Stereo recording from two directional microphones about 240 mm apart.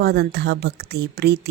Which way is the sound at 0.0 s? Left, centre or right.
Right.